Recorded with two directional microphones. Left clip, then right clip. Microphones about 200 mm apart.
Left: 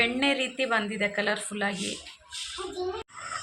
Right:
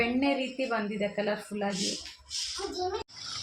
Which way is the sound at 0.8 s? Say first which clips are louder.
Left 3 dB; 45° left (ahead or behind).